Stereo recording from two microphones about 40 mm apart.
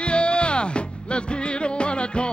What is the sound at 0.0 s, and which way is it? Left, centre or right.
Music, left.